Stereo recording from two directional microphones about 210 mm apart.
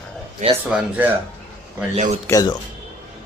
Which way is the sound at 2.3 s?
15° left (ahead or behind).